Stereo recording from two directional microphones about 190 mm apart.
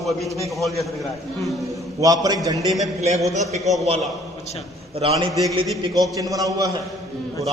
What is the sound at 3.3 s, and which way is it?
Speech, 35° right (ahead or behind).